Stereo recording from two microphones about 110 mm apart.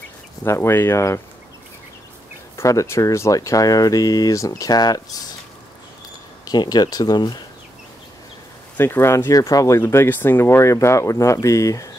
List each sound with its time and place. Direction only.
0.4 s speech: 20° left (ahead or behind)
2.5 s speech: 25° left (ahead or behind)
6.4 s speech: 35° left (ahead or behind)
8.7 s speech: 20° left (ahead or behind)